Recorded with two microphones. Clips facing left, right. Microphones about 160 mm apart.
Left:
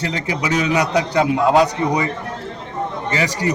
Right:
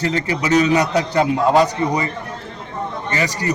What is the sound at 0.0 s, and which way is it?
A man's voice, 10° left (ahead or behind).